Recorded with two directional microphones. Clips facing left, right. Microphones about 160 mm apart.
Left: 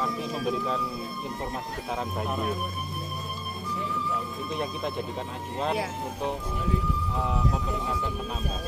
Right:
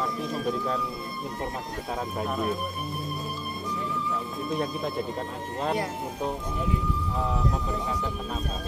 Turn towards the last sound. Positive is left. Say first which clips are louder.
# even
turn(degrees=0)  # may be behind; listen again after turning